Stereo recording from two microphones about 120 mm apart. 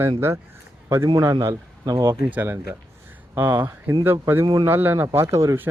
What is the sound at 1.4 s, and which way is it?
Speech, 30° right (ahead or behind).